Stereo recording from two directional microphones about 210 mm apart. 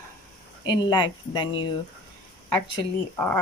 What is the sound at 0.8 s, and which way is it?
Speech, 20° left (ahead or behind).